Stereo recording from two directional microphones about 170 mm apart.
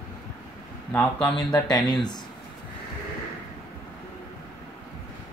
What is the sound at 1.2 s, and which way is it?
Speech, 25° left (ahead or behind).